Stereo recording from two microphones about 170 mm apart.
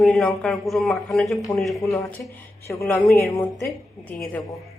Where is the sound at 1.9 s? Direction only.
20° left (ahead or behind).